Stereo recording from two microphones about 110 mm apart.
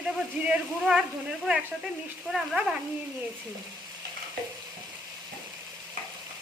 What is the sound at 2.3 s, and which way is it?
Speech, centre (ahead or behind).